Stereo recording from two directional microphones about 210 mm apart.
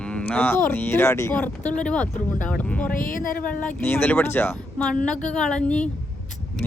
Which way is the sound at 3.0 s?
40° left (ahead or behind).